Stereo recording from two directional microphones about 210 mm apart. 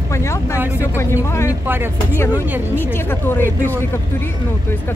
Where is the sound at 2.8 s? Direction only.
10° left (ahead or behind).